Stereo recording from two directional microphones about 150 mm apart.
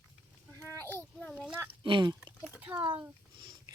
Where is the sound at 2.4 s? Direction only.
10° right (ahead or behind).